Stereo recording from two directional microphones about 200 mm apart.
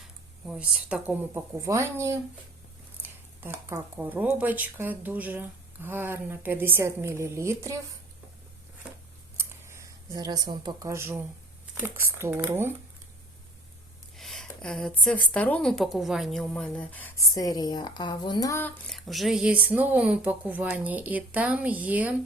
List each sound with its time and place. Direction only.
0.4 s speech: 5° right (ahead or behind)
9.4 s a sound: 15° right (ahead or behind)
11.8 s speech: 10° right (ahead or behind)
14.2 s speech: centre (ahead or behind)
18.9 s speech: centre (ahead or behind)